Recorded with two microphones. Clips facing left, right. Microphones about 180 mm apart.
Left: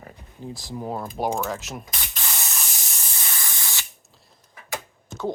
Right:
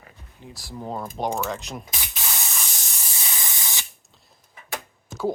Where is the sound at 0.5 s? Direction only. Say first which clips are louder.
Left 3 dB; 20° left (ahead or behind).